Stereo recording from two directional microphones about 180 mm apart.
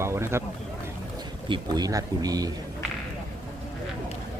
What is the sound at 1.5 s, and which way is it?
Speech, 20° right (ahead or behind).